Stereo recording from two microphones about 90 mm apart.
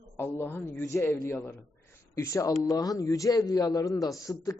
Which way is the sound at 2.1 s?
35° left (ahead or behind).